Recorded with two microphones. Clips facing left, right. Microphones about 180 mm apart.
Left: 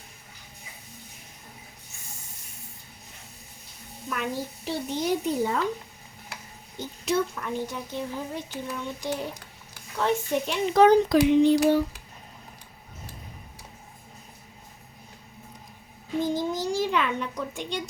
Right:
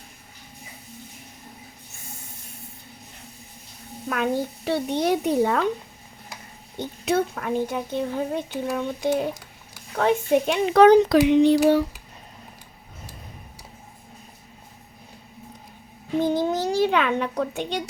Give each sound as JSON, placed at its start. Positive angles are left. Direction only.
{"t": 4.1, "sound": "speech", "side_deg": -65}
{"t": 6.7, "sound": "speech", "side_deg": -60}
{"t": 16.2, "sound": "speech", "side_deg": -65}